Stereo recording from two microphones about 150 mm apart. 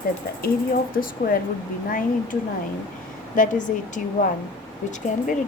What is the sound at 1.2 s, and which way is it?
A woman's voice, 75° left (ahead or behind).